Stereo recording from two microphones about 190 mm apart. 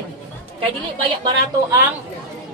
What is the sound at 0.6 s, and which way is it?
A woman's voice, 25° right (ahead or behind).